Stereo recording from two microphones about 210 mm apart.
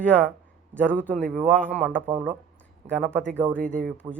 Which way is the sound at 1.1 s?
5° left (ahead or behind).